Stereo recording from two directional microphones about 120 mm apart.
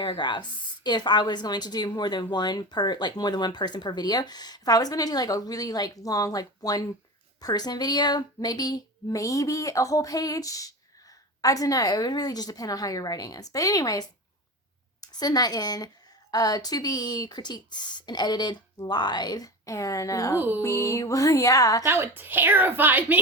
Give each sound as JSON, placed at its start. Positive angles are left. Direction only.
{"t": 0.0, "sound": "a woman's voice", "side_deg": 40}
{"t": 15.0, "sound": "a woman's voice", "side_deg": 35}
{"t": 20.6, "sound": "music", "side_deg": 25}
{"t": 21.8, "sound": "a woman's voice", "side_deg": -20}